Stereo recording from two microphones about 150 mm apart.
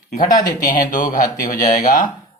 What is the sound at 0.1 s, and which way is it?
Speech, 60° left (ahead or behind).